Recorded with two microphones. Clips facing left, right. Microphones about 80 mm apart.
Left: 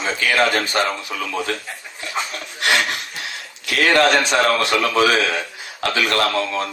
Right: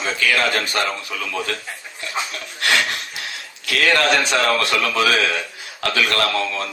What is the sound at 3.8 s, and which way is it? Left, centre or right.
A man's voice, left.